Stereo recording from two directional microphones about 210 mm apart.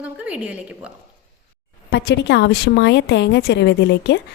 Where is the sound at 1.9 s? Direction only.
55° left (ahead or behind).